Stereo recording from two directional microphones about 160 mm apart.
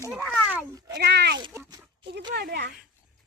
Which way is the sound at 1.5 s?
15° right (ahead or behind).